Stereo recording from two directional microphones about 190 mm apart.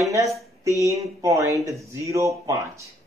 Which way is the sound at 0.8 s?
15° right (ahead or behind).